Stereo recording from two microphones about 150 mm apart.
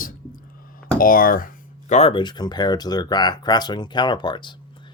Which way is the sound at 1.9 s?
45° left (ahead or behind).